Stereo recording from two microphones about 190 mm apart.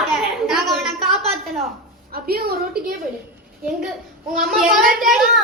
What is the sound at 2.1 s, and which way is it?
Speech, 55° right (ahead or behind).